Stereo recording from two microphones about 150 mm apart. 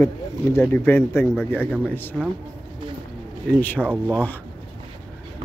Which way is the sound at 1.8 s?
15° left (ahead or behind).